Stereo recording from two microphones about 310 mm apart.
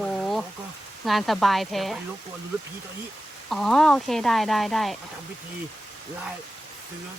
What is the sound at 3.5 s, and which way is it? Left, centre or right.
Speech, centre.